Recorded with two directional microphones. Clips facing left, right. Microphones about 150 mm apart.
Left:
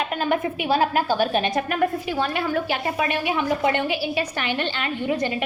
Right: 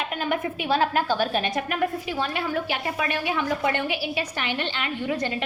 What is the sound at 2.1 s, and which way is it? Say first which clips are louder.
Speech: left 3 dB; 55° left (ahead or behind).